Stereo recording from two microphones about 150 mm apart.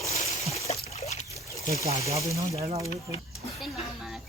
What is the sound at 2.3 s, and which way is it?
Speech, 20° right (ahead or behind).